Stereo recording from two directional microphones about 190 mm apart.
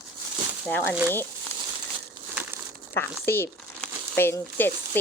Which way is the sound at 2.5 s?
10° right (ahead or behind).